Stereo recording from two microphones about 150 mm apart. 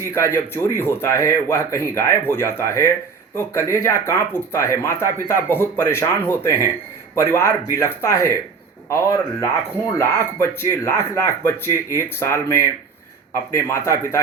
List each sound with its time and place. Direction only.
0.0 s speech: 15° left (ahead or behind)